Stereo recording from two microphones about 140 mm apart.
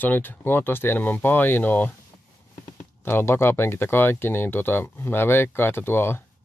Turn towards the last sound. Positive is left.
turn(degrees=15)  # may be behind; listen again after turning